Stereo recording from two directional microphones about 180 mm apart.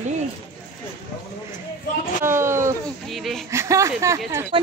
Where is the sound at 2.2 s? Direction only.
15° right (ahead or behind).